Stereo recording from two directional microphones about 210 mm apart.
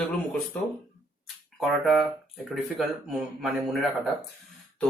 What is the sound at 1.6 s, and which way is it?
Speech, centre (ahead or behind).